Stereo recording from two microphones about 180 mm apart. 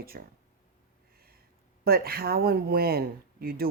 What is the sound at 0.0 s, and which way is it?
Speech, 55° right (ahead or behind).